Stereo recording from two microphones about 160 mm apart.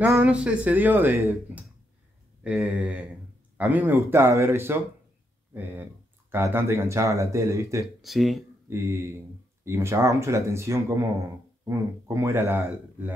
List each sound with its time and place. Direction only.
0.0 s speech: 10° right (ahead or behind)
7.8 s speech: centre (ahead or behind)
8.6 s speech: 15° right (ahead or behind)